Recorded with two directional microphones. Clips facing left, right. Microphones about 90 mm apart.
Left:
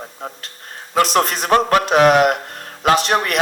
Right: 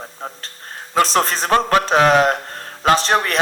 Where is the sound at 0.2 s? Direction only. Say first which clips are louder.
Even; 35° right (ahead or behind).